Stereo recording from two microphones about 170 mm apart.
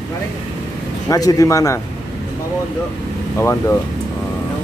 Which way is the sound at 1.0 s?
20° left (ahead or behind).